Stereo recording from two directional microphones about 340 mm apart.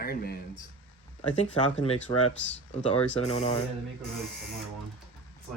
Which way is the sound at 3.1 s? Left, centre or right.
Centre.